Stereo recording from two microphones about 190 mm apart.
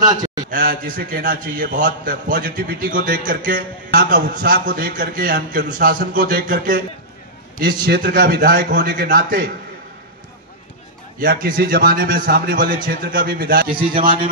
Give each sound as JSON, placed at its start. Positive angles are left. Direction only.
{"t": 0.0, "sound": "a sound", "side_deg": -20}
{"t": 0.5, "sound": "a man's voice", "side_deg": -50}
{"t": 11.1, "sound": "a man's voice", "side_deg": -50}
{"t": 13.7, "sound": "a man's voice", "side_deg": -25}